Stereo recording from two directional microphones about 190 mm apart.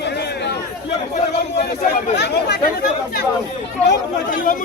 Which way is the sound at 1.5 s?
55° left (ahead or behind).